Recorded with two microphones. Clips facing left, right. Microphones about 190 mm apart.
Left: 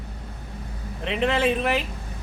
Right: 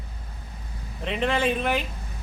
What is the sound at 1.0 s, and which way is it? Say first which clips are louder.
Speech: left 2 dB; centre (ahead or behind).